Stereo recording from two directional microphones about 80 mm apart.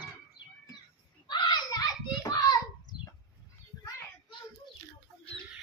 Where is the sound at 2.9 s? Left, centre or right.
Centre.